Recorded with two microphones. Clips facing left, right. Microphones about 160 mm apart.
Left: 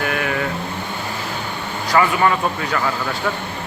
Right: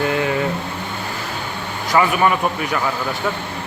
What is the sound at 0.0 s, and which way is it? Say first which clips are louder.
Vehicle: right 3 dB; 25° right (ahead or behind).